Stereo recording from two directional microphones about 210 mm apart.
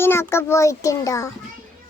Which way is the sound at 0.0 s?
10° left (ahead or behind).